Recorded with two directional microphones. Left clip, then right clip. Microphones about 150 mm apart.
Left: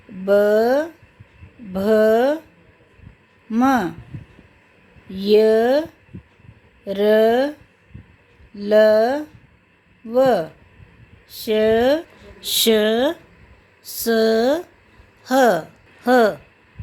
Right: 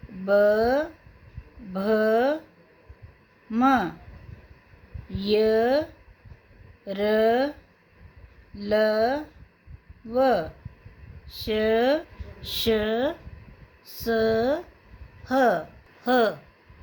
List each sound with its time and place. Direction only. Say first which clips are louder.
0.3 s a sound: left 5 dB; 60° left (ahead or behind)
3.5 s a woman's voice: left 3 dB; 55° left (ahead or behind)
5.1 s a woman's voice: left 7 dB; 55° left (ahead or behind)
8.5 s a woman's voice: left 9 dB; 55° left (ahead or behind)